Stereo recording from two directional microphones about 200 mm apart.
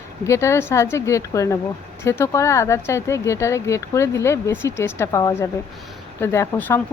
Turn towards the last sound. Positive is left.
turn(degrees=10)  # may be behind; listen again after turning